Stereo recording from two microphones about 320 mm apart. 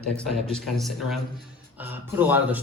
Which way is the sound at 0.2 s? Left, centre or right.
Centre.